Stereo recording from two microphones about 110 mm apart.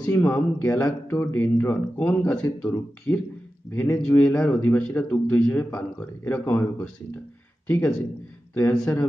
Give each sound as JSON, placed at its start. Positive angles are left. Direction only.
{"t": 0.0, "sound": "speech", "side_deg": 15}
{"t": 4.3, "sound": "speech", "side_deg": 10}